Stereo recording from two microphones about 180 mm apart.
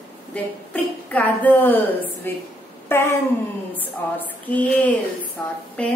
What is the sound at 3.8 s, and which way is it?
A woman's voice, 10° left (ahead or behind).